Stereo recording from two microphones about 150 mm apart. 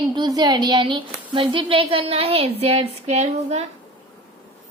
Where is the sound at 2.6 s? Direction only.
45° right (ahead or behind).